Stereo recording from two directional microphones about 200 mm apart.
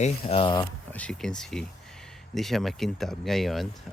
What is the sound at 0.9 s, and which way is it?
Speech, 5° left (ahead or behind).